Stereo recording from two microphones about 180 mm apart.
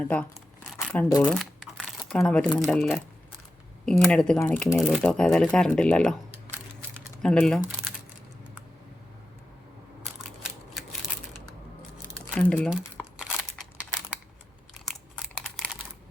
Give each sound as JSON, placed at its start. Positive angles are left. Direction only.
{"t": 0.0, "sound": "speech", "side_deg": 5}
{"t": 1.2, "sound": "crumpling", "side_deg": 0}
{"t": 2.6, "sound": "speech", "side_deg": 5}
{"t": 6.9, "sound": "a sound", "side_deg": 5}
{"t": 12.3, "sound": "speech", "side_deg": 5}
{"t": 12.7, "sound": "crumpling", "side_deg": -5}
{"t": 14.8, "sound": "computer keyboard", "side_deg": 0}